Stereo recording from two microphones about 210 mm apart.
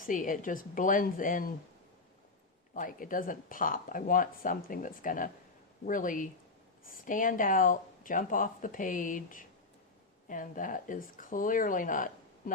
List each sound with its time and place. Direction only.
0.0 s speech: 40° left (ahead or behind)
2.7 s speech: 40° left (ahead or behind)